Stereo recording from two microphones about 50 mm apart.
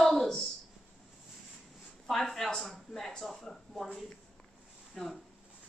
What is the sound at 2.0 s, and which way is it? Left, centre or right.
Speech, centre.